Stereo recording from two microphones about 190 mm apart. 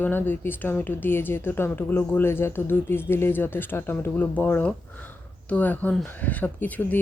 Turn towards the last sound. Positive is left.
turn(degrees=10)  # may be behind; listen again after turning